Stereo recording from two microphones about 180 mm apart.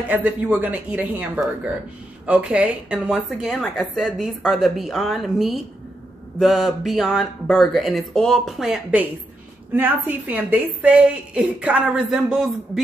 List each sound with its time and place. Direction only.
0.1 s a woman's voice: 10° right (ahead or behind)